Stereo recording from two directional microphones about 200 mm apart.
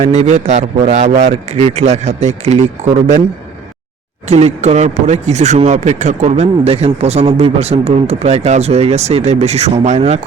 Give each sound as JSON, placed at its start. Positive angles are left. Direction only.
{"t": 0.0, "sound": "speech", "side_deg": -35}
{"t": 4.3, "sound": "speech", "side_deg": -35}